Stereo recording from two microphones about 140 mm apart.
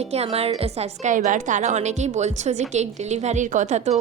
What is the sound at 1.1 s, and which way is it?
A woman's voice, 65° right (ahead or behind).